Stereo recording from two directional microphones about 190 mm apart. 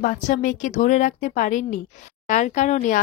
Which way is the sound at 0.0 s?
45° left (ahead or behind).